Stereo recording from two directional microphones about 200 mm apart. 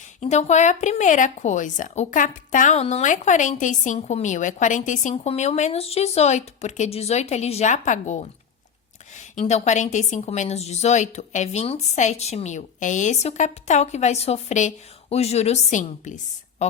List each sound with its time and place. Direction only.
0.2 s a woman's voice: 35° left (ahead or behind)